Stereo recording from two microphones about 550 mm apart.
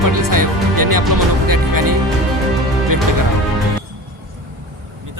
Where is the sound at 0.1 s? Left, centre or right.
Right.